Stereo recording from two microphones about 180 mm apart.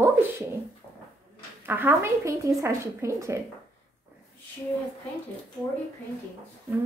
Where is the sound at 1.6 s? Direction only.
10° right (ahead or behind).